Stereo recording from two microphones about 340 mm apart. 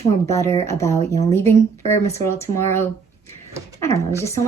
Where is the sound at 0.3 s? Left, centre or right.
Centre.